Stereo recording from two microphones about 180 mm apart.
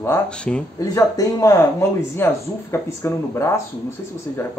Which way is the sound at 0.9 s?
20° left (ahead or behind).